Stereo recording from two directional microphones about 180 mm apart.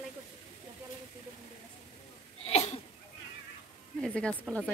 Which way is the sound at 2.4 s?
35° left (ahead or behind).